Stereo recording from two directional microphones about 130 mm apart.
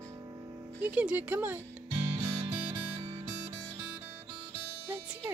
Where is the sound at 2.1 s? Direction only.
40° right (ahead or behind).